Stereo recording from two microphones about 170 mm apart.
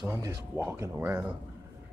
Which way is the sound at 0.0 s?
15° right (ahead or behind).